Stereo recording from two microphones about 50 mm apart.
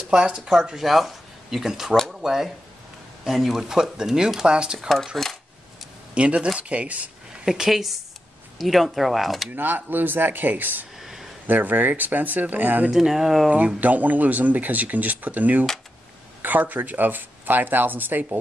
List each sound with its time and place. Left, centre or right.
0.1 s speech: centre
4.7 s speech: centre
6.1 s speech: right
7.4 s speech: centre
9.5 s speech: right
11.0 s a sound: centre
11.4 s speech: right
12.9 s speech: centre
13.5 s speech: right